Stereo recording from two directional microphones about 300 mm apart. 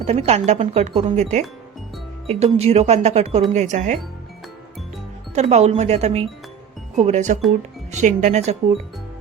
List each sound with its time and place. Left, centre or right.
0.0 s speech: right
5.3 s speech: right